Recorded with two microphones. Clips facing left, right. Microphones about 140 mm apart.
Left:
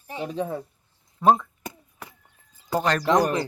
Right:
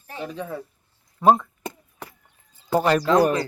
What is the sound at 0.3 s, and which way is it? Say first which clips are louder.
Speech: left 4 dB; 25° left (ahead or behind).